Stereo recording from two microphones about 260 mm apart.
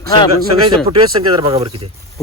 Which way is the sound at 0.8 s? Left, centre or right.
Centre.